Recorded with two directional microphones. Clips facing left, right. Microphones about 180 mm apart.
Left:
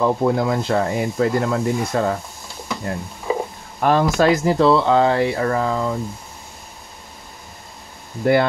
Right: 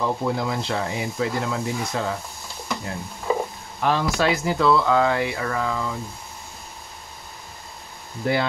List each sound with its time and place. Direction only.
0.0 s speech: 50° left (ahead or behind)
3.8 s speech: 45° left (ahead or behind)
8.2 s speech: 55° left (ahead or behind)